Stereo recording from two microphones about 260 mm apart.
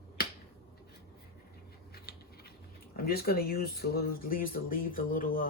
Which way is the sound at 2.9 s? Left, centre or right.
Left.